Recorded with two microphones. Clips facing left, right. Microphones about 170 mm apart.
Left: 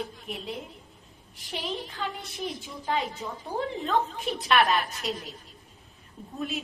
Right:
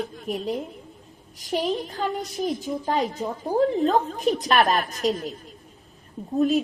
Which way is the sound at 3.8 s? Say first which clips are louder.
Right 6 dB; 40° right (ahead or behind).